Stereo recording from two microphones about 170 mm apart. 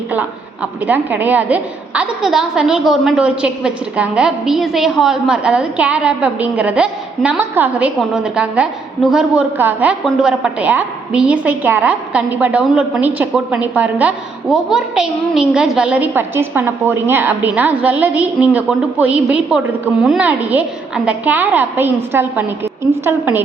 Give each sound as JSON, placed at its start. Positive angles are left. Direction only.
{"t": 0.1, "sound": "a woman's voice", "side_deg": -10}